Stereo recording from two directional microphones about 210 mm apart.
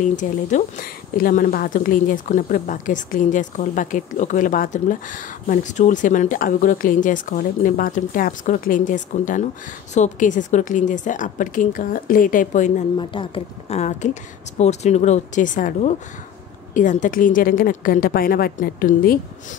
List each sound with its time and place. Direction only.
0.0 s speech: 35° left (ahead or behind)
12.9 s speech: 25° left (ahead or behind); by 19.1 s 40° left (ahead or behind)